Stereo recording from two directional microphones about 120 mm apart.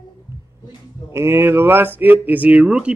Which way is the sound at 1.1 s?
20° right (ahead or behind).